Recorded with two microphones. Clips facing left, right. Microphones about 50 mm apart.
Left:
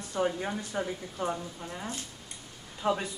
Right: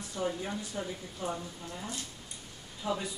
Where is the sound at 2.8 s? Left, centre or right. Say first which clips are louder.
Left 5 dB; left.